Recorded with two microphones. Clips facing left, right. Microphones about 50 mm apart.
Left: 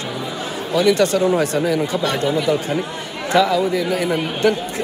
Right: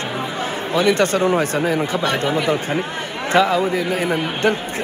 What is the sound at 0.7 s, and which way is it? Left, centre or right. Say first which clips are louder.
A man's voice: left 1 dB; right.